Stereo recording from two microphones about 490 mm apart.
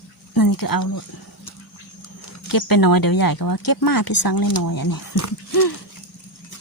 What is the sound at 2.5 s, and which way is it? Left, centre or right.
Speech, left.